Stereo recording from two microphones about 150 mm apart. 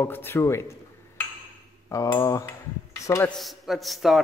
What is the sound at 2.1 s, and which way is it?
Speech, 20° left (ahead or behind).